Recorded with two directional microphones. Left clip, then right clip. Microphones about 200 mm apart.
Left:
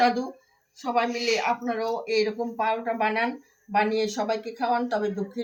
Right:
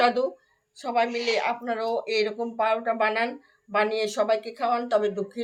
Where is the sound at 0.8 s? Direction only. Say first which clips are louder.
Even; 55° right (ahead or behind).